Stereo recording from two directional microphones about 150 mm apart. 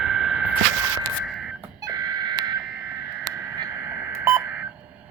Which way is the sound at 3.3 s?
25° right (ahead or behind).